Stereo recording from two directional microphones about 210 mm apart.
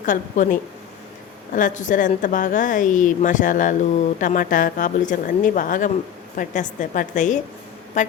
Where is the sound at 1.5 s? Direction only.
35° left (ahead or behind).